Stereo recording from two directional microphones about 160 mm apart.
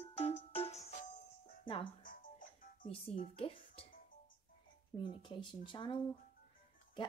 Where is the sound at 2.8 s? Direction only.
35° left (ahead or behind).